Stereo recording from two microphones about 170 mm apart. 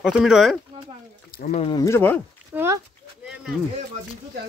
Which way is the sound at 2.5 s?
15° right (ahead or behind).